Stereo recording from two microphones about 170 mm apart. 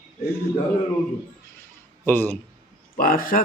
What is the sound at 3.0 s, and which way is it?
Speech, 55° left (ahead or behind).